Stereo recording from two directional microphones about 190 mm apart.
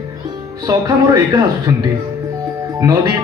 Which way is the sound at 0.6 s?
20° right (ahead or behind).